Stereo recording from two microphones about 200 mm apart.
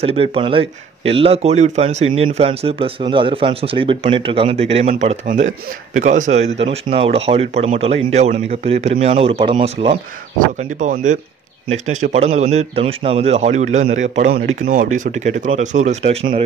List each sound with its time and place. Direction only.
0.0 s speech: 30° right (ahead or behind)
10.8 s speech: 40° right (ahead or behind)